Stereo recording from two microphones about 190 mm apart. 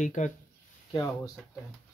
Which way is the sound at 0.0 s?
40° left (ahead or behind).